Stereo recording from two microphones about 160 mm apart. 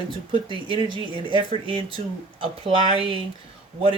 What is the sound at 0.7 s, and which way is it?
Speech, 30° right (ahead or behind).